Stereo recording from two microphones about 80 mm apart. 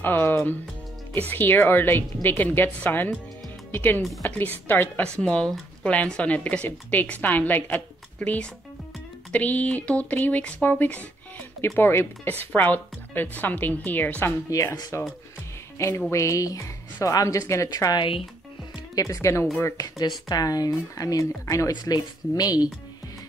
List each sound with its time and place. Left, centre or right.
0.0 s speech: left
5.0 s speech: centre
14.5 s speech: left
16.1 s speech: left
18.9 s speech: left
19.8 s speech: left
21.7 s speech: left